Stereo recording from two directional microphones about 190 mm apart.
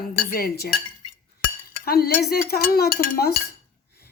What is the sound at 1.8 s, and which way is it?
Cutlery, 50° left (ahead or behind).